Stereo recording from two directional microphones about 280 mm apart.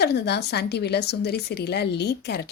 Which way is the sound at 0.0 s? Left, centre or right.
Left.